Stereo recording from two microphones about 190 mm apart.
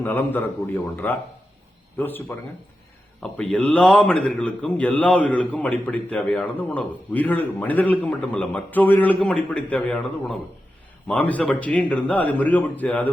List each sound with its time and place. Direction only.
0.0 s speech: 10° left (ahead or behind)